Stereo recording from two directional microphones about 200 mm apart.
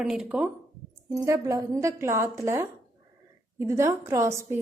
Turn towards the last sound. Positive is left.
turn(degrees=-15)  # may be behind; listen again after turning